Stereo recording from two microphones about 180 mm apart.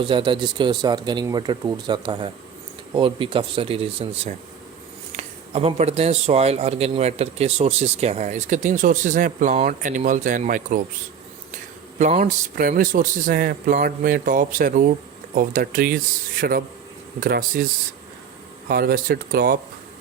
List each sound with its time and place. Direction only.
0.0 s speech: 25° right (ahead or behind); by 17.6 s 55° right (ahead or behind)
18.7 s speech: 60° right (ahead or behind)